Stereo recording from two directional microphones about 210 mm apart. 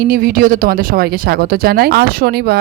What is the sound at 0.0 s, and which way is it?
Speech, 45° right (ahead or behind).